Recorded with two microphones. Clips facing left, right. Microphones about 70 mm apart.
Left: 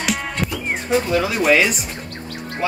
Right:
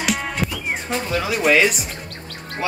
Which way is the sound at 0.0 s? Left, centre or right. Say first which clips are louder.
Even; centre.